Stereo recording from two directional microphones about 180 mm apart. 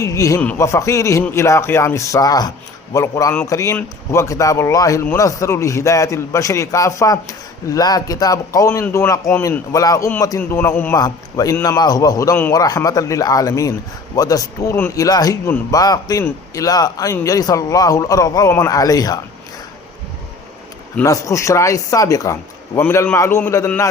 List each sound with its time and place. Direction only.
0.0 s a man's voice: 15° left (ahead or behind)
20.9 s a man's voice: 15° left (ahead or behind)